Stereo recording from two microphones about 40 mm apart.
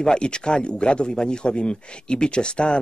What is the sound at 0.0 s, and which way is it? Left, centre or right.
Speech, left.